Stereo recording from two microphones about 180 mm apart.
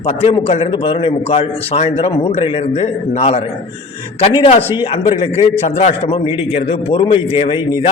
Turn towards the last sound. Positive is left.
turn(degrees=30)  # may be behind; listen again after turning